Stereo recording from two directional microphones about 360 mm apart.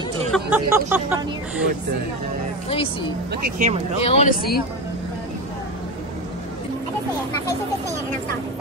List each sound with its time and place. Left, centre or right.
0.3 s speech: centre
3.4 s speech: right
4.0 s speech: centre